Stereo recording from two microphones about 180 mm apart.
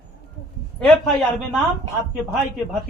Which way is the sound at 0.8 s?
5° left (ahead or behind).